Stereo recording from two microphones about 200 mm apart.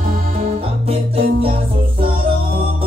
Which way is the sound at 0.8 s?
30° right (ahead or behind).